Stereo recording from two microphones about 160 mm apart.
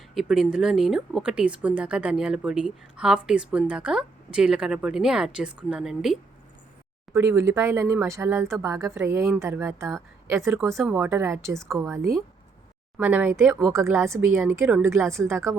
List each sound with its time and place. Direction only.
0.1 s speech: centre (ahead or behind)
7.1 s speech: 15° right (ahead or behind)